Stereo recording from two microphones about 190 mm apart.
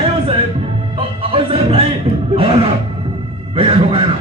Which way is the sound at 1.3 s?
30° right (ahead or behind).